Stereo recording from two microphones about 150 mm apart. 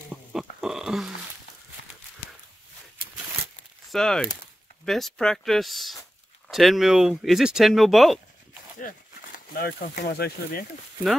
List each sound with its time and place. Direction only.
0.1 s pig: 5° right (ahead or behind)
3.9 s speech: 5° left (ahead or behind)
8.7 s speech: 65° left (ahead or behind); by 10.6 s 90° left